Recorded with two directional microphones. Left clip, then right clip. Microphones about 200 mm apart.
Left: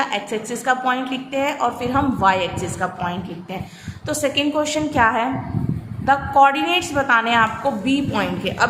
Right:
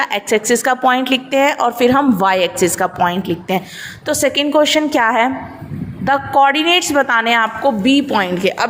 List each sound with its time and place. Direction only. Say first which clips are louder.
0.0 s a woman's voice: right 7 dB; 40° right (ahead or behind)